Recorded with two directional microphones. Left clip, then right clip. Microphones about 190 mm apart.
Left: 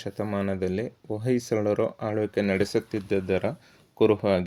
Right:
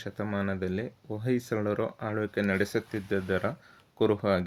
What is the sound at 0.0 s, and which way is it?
Speech, 30° left (ahead or behind).